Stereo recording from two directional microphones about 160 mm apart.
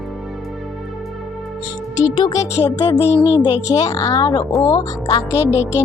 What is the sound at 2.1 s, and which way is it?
A woman's voice, 25° left (ahead or behind).